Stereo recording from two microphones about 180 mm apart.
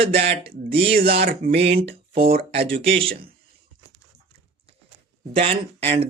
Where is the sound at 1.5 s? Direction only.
35° right (ahead or behind).